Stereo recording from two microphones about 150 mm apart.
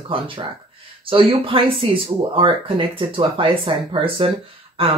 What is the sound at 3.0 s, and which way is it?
Speech, 35° right (ahead or behind).